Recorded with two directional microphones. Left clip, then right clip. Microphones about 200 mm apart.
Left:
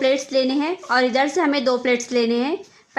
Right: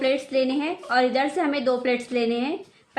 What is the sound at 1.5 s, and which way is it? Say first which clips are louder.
Speech: left 4 dB; 25° left (ahead or behind).